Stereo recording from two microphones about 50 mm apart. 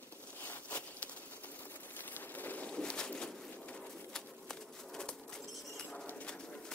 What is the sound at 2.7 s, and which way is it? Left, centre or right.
Bird, centre.